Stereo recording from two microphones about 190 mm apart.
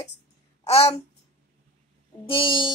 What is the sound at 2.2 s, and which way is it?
Speech, 25° left (ahead or behind).